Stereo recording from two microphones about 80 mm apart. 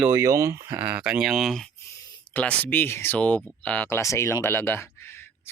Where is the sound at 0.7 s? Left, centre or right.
Centre.